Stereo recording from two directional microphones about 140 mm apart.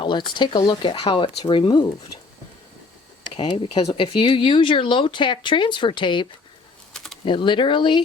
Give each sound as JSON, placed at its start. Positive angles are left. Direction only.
{"t": 0.0, "sound": "speech", "side_deg": 35}
{"t": 3.2, "sound": "speech", "side_deg": 35}
{"t": 6.9, "sound": "typing", "side_deg": 0}
{"t": 7.3, "sound": "speech", "side_deg": 35}